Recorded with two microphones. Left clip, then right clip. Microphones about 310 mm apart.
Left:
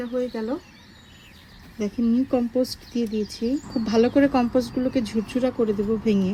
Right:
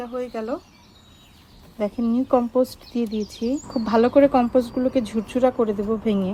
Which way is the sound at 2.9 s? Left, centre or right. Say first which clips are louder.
Even; right.